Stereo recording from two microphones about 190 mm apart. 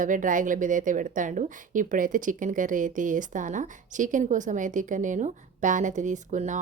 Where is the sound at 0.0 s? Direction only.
45° right (ahead or behind).